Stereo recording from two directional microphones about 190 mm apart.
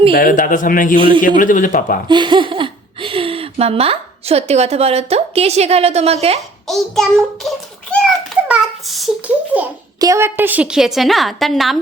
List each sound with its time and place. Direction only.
0.1 s a man's voice: 45° left (ahead or behind)
2.0 s speech: 25° right (ahead or behind)
6.7 s a child's voice: centre (ahead or behind)